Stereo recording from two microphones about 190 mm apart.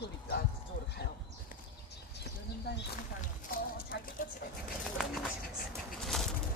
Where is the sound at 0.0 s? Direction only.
55° left (ahead or behind).